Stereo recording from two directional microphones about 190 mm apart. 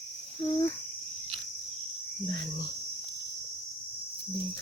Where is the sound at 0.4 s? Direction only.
15° left (ahead or behind).